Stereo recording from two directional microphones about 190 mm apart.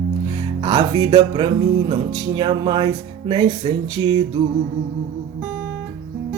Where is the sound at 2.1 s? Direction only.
25° right (ahead or behind).